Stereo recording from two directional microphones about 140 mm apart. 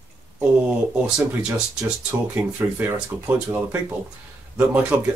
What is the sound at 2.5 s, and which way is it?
Speech, 15° right (ahead or behind).